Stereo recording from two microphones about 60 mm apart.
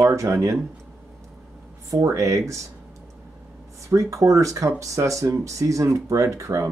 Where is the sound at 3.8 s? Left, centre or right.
Right.